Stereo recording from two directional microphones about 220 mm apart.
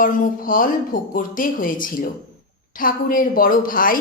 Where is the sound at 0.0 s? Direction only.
40° left (ahead or behind).